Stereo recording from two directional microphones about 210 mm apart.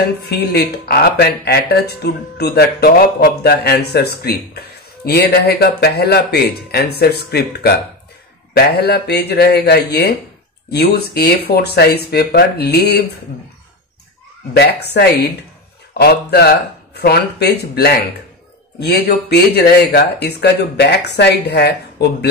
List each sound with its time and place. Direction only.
0.2 s speech: 50° left (ahead or behind)
14.5 s speech: 50° left (ahead or behind)